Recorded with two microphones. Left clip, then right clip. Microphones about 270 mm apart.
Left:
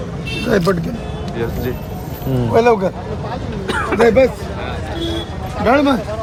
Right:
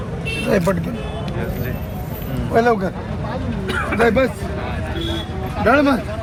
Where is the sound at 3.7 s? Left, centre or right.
Left.